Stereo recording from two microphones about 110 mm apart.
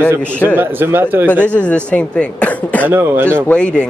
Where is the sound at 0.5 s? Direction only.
20° right (ahead or behind).